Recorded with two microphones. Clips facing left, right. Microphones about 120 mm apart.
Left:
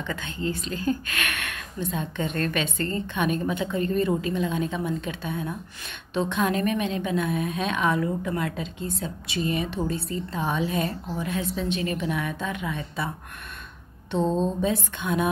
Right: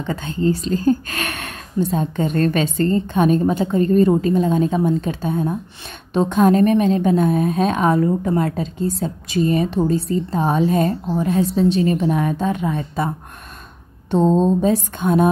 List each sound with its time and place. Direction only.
0.0 s a woman's voice: 35° right (ahead or behind)
14.1 s a woman's voice: 40° right (ahead or behind)